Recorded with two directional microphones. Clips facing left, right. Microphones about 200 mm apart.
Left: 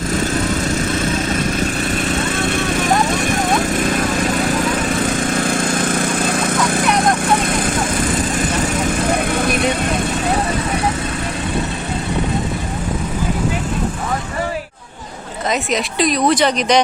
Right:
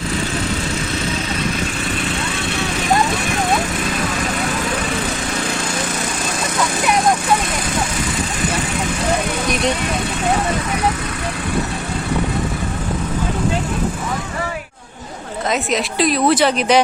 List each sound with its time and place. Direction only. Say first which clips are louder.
2.4 s vehicle: left 4 dB; 50° left (ahead or behind)
5.2 s lawn mower: left 5 dB; 50° left (ahead or behind)
9.4 s vehicle: left 3 dB; 55° left (ahead or behind)
15.7 s a woman's voice: even; centre (ahead or behind)